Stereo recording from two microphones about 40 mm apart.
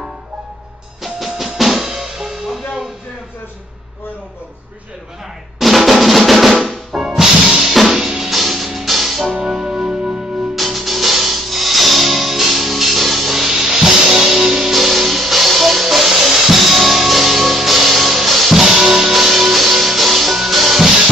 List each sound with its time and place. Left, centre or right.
1.0 s drum: centre
5.6 s drum: centre
6.5 s music: centre
6.9 s music: centre
9.3 s music: centre
10.5 s music: centre